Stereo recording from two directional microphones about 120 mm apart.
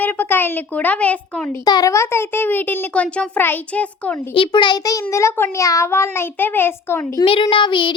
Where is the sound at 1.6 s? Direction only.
30° left (ahead or behind); by 4.2 s 10° left (ahead or behind).